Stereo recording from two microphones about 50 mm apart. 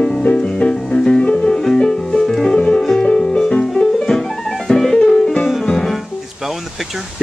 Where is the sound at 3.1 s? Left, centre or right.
Centre.